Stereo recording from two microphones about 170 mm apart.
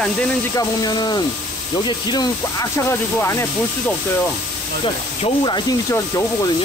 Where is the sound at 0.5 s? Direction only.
25° left (ahead or behind).